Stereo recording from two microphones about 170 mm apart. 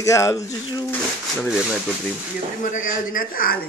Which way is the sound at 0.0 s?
20° left (ahead or behind).